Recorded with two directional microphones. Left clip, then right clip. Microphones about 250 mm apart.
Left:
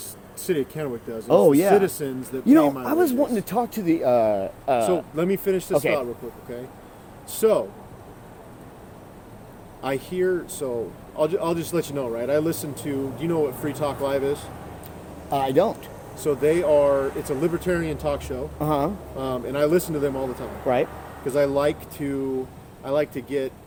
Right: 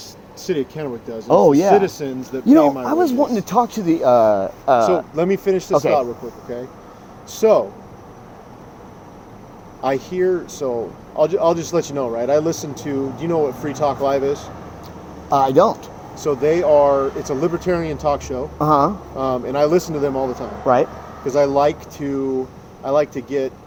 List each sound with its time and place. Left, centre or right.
0.4 s speech: centre
1.3 s speech: centre
1.8 s speech: centre
2.5 s speech: centre
3.2 s speech: right
5.1 s speech: centre
5.7 s speech: centre
7.3 s speech: centre
9.8 s speech: centre
15.3 s speech: right
16.2 s speech: centre
18.6 s speech: centre
19.1 s speech: centre
21.3 s speech: centre